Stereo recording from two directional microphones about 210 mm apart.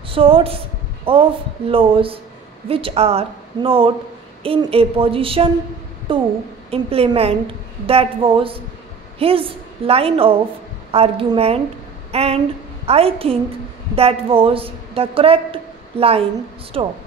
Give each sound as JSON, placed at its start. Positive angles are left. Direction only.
{"t": 0.1, "sound": "a woman's voice", "side_deg": -25}